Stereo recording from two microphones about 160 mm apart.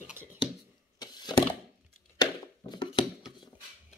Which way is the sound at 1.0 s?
25° left (ahead or behind).